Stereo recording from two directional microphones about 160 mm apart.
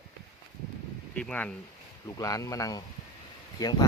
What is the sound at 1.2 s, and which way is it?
Speech, 10° left (ahead or behind).